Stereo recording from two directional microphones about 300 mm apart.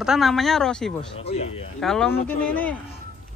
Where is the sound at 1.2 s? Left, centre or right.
Left.